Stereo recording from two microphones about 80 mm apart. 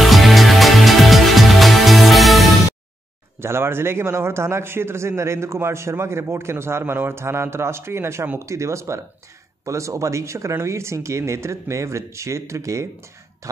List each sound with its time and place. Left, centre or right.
0.0 s music: centre
3.3 s a man's voice: right